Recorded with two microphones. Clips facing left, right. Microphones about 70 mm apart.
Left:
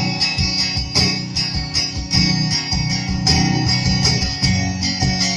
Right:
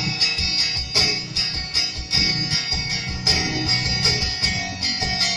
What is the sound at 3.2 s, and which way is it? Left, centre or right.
Music, centre.